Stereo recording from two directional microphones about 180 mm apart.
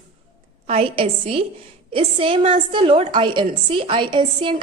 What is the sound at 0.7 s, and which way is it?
A woman's voice, 30° right (ahead or behind).